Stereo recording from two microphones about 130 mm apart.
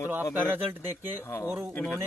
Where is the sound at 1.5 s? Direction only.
20° right (ahead or behind).